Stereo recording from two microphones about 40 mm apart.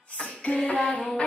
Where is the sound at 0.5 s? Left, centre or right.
Left.